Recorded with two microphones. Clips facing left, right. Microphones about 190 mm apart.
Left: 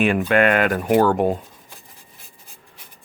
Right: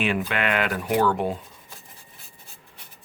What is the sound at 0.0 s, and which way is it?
Speech, 45° left (ahead or behind).